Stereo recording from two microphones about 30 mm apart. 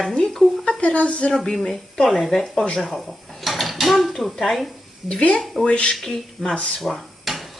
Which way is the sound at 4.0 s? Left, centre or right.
Centre.